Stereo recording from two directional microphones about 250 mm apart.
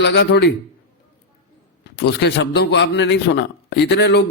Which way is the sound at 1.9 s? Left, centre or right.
Left.